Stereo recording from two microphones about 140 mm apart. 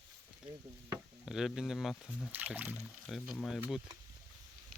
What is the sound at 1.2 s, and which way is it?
Speech, 5° right (ahead or behind).